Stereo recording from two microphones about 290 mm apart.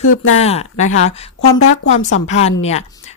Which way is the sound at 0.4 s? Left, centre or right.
Left.